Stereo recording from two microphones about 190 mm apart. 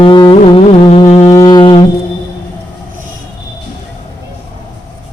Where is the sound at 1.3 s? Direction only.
20° left (ahead or behind).